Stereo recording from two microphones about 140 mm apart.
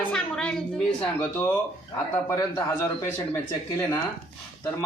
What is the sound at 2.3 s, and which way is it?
Speech, 25° left (ahead or behind).